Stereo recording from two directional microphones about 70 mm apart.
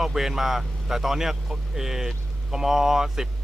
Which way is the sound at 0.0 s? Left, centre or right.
Centre.